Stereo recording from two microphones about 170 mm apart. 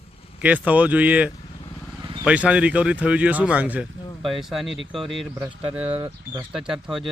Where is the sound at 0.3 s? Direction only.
10° right (ahead or behind).